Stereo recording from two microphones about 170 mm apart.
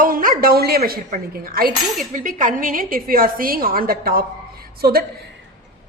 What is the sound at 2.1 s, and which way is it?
A woman's voice, 50° right (ahead or behind).